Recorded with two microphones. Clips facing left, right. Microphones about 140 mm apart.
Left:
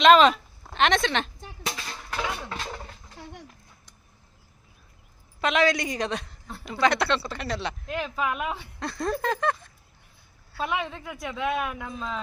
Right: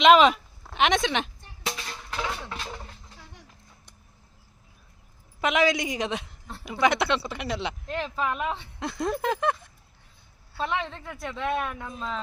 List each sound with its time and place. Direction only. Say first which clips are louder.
0.0 s speech: even; 15° right (ahead or behind)
2.2 s a sound: left 1 dB; 10° left (ahead or behind)
5.4 s speech: even; 15° right (ahead or behind)
7.9 s speech: left 1 dB; 5° left (ahead or behind)
8.8 s speech: even; 15° right (ahead or behind)
10.6 s speech: even; 10° left (ahead or behind)